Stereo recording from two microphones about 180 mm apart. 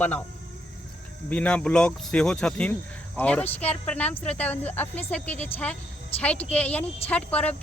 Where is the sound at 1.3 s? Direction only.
5° left (ahead or behind).